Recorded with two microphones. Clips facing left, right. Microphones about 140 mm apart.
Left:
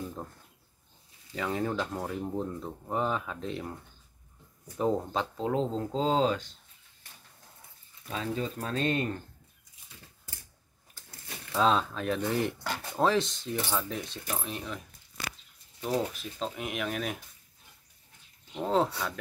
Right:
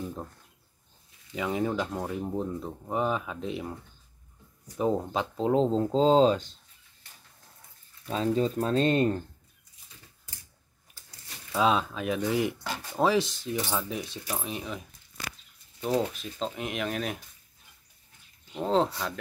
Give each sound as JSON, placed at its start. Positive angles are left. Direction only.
{"t": 1.3, "sound": "speech", "side_deg": -10}
{"t": 4.7, "sound": "speech", "side_deg": -10}
{"t": 5.4, "sound": "speech", "side_deg": -25}
{"t": 8.1, "sound": "speech", "side_deg": -30}
{"t": 11.5, "sound": "speech", "side_deg": -5}
{"t": 16.0, "sound": "speech", "side_deg": 5}
{"t": 18.7, "sound": "speech", "side_deg": 5}